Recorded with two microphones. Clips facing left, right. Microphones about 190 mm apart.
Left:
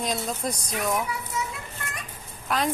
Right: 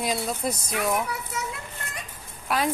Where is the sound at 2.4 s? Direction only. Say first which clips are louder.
Right 1 dB; 5° right (ahead or behind).